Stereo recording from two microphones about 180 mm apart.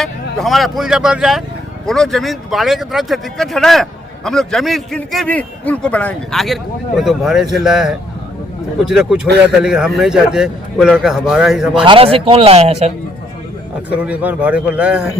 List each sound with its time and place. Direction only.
0.3 s speech: centre (ahead or behind)
11.8 s speech: 30° right (ahead or behind)
13.9 s a man's voice: 5° right (ahead or behind)